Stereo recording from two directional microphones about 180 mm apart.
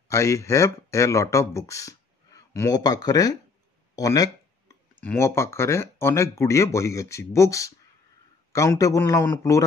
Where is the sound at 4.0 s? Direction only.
20° left (ahead or behind).